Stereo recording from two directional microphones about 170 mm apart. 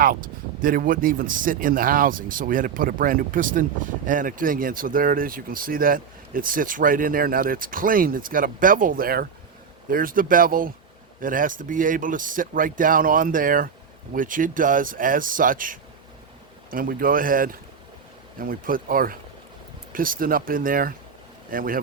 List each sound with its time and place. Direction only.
0.6 s speech: 55° right (ahead or behind)